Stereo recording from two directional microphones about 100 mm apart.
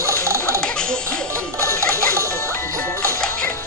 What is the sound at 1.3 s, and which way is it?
Music, 30° right (ahead or behind).